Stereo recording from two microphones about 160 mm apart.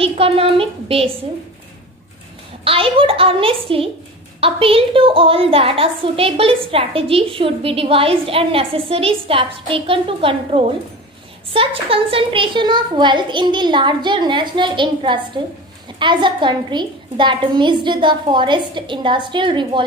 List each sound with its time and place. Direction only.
0.0 s a woman's voice: 35° right (ahead or behind)
2.6 s a woman's voice: 35° right (ahead or behind)